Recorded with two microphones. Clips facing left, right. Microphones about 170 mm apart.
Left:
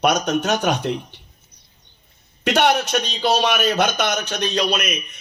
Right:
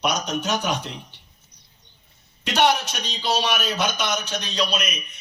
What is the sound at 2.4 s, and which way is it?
A man's voice, 55° left (ahead or behind).